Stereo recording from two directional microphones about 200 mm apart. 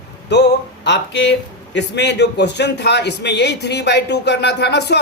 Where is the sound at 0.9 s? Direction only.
60° left (ahead or behind).